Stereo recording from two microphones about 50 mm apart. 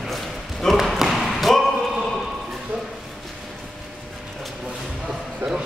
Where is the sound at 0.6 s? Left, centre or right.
Centre.